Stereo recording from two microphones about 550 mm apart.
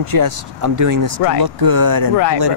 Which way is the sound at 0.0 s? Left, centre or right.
Right.